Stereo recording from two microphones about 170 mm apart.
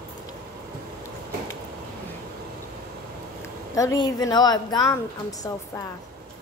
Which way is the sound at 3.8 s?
20° left (ahead or behind).